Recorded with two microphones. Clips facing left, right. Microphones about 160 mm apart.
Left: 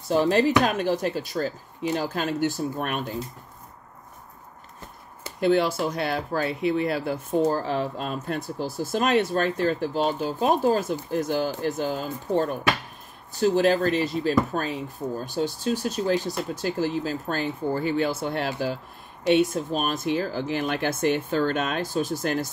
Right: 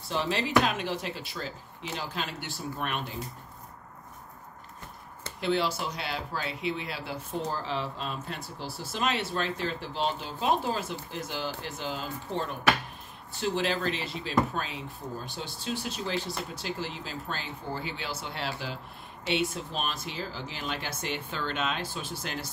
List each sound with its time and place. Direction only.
0.1 s speech: 45° left (ahead or behind)
5.4 s speech: 50° left (ahead or behind)